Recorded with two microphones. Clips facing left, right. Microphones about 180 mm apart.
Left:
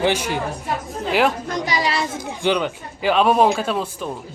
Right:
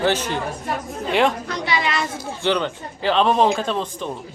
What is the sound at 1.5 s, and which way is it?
Speech, 45° left (ahead or behind).